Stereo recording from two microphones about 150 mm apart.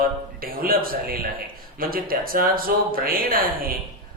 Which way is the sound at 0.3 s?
75° right (ahead or behind).